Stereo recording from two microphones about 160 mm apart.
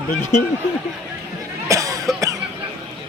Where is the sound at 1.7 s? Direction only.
20° right (ahead or behind).